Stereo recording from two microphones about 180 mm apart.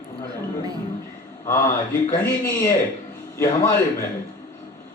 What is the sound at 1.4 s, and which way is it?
A man's voice, 15° left (ahead or behind).